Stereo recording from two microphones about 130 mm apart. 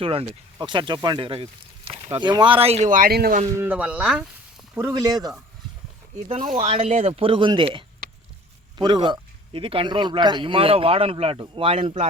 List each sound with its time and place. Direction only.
0.0 s speech: 45° right (ahead or behind); by 3.4 s 80° right
3.6 s speech: 10° right (ahead or behind)
4.7 s speech: 20° right (ahead or behind)
6.2 s speech: 50° right (ahead or behind)